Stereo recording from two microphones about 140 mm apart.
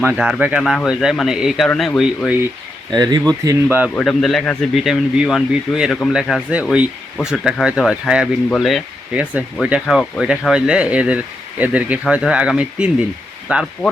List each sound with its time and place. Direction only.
0.0 s speech: 10° right (ahead or behind); by 2.0 s 5° left (ahead or behind)
2.9 s speech: 30° right (ahead or behind)
3.9 s speech: 5° left (ahead or behind)